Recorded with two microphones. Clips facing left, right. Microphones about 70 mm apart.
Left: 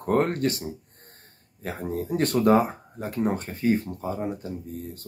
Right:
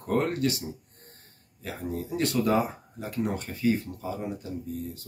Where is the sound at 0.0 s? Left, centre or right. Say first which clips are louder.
Left 3 dB; left.